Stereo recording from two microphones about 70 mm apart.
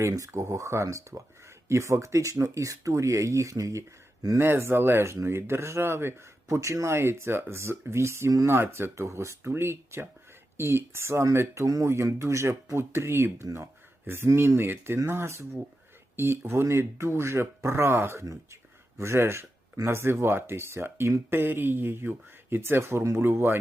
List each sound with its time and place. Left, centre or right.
0.2 s speech: right
4.4 s speech: right
8.4 s speech: right